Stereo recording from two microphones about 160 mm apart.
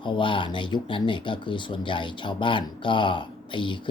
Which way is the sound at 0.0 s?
30° left (ahead or behind).